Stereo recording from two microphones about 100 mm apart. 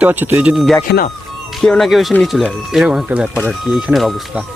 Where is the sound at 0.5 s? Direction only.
Centre (ahead or behind).